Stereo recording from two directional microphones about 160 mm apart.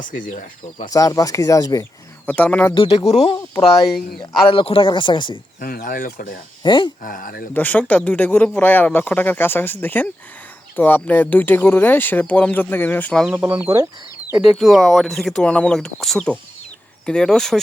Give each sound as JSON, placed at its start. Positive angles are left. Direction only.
{"t": 0.0, "sound": "speech", "side_deg": 55}
{"t": 0.9, "sound": "speech", "side_deg": 20}
{"t": 2.2, "sound": "speech", "side_deg": 10}
{"t": 2.7, "sound": "speech", "side_deg": 35}
{"t": 5.5, "sound": "speech", "side_deg": 60}
{"t": 6.6, "sound": "speech", "side_deg": 30}
{"t": 7.0, "sound": "speech", "side_deg": 60}
{"t": 7.5, "sound": "speech", "side_deg": 10}
{"t": 13.3, "sound": "speech", "side_deg": -15}
{"t": 14.3, "sound": "speech", "side_deg": 0}